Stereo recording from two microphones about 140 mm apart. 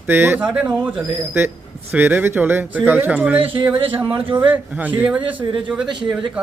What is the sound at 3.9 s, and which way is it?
Speech, 15° right (ahead or behind).